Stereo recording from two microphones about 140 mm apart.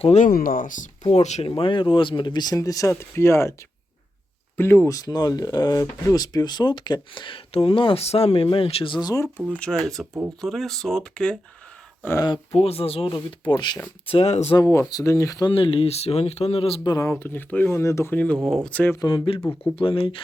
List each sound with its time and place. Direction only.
0.0 s speech: 50° left (ahead or behind)
0.3 s speech: 90° left; by 0.9 s 70° left (ahead or behind)
1.1 s speech: 50° left (ahead or behind)
1.5 s speech: 40° left (ahead or behind); by 3.5 s 20° left (ahead or behind)
4.5 s speech: 15° left (ahead or behind)
9.6 s speech: 5° left (ahead or behind)
12.2 s speech: 30° left (ahead or behind)
12.5 s speech: 45° left (ahead or behind)
14.5 s speech: 20° left (ahead or behind)
15.5 s speech: 40° left (ahead or behind)
16.9 s speech: 20° left (ahead or behind)
18.9 s speech: 35° left (ahead or behind)